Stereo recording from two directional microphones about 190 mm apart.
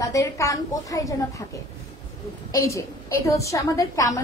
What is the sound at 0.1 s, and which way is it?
A woman's voice, 15° left (ahead or behind).